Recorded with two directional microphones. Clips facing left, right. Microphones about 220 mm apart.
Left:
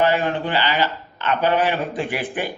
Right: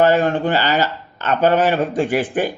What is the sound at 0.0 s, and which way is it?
A man's voice, 45° right (ahead or behind).